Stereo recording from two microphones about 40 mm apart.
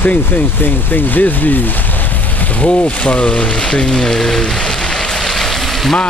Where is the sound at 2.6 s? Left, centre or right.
Left; by 5.0 s centre.